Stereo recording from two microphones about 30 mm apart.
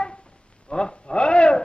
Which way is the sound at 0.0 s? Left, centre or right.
Left.